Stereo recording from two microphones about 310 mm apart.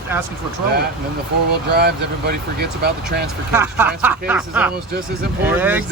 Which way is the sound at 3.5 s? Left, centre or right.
Centre.